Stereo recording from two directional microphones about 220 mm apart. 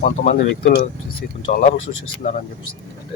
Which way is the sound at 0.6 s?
45° left (ahead or behind).